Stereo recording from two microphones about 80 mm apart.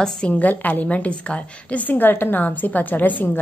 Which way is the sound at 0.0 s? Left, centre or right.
Centre.